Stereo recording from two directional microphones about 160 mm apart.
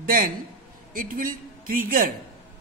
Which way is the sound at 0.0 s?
60° right (ahead or behind).